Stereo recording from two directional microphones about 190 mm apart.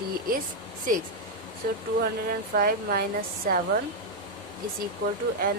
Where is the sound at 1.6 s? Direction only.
50° right (ahead or behind).